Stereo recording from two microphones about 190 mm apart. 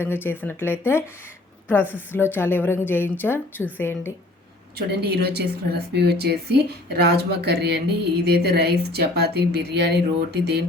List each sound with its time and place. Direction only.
0.0 s a woman's voice: 10° left (ahead or behind)
4.9 s speech: 60° right (ahead or behind)